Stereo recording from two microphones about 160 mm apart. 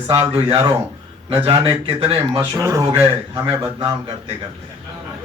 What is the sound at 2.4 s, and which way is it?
Speech, 20° right (ahead or behind).